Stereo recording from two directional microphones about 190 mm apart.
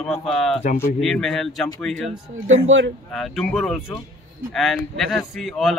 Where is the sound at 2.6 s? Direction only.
85° right.